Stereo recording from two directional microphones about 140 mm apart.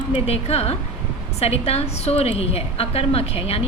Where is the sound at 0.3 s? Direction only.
45° left (ahead or behind).